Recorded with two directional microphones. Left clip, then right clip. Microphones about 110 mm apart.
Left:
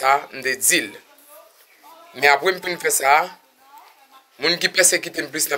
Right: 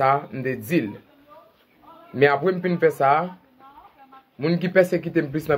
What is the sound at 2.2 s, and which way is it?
Speech, 10° right (ahead or behind).